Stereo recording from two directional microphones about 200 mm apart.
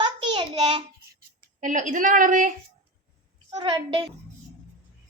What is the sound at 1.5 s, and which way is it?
Speech, 40° right (ahead or behind).